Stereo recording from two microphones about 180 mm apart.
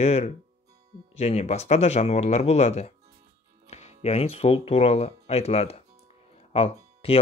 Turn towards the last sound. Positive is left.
turn(degrees=35)  # may be behind; listen again after turning